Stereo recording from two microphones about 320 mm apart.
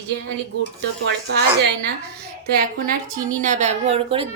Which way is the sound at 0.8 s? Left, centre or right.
Right.